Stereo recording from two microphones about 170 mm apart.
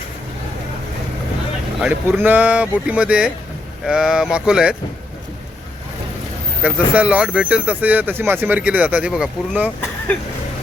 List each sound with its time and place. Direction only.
1.8 s speech: 10° right (ahead or behind)
6.6 s speech: 10° right (ahead or behind)